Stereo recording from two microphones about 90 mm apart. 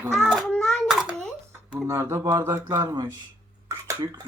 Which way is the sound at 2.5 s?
45° right (ahead or behind).